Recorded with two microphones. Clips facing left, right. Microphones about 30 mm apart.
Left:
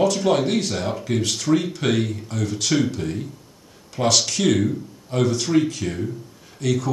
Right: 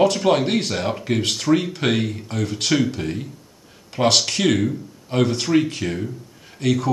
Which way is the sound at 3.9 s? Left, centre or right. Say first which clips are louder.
Right 2 dB; right.